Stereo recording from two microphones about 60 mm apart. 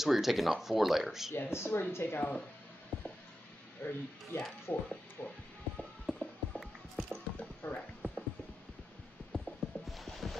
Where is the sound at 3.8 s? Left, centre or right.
Left.